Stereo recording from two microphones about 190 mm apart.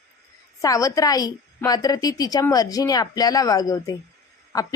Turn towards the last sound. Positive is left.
turn(degrees=20)  # may be behind; listen again after turning